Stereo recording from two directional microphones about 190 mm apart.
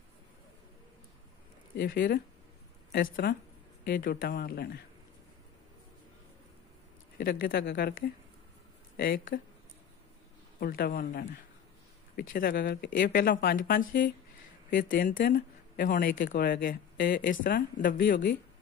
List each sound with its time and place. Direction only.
1.8 s speech: 50° left (ahead or behind)
7.2 s speech: 50° left (ahead or behind)
8.9 s speech: 55° left (ahead or behind)
10.6 s speech: 50° left (ahead or behind)